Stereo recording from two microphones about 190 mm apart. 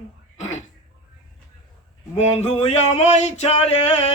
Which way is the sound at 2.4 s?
35° left (ahead or behind).